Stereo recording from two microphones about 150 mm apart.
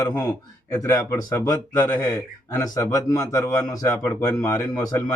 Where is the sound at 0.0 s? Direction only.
25° left (ahead or behind).